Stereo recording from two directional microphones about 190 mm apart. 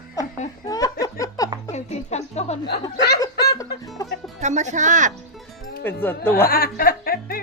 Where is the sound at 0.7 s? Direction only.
20° left (ahead or behind).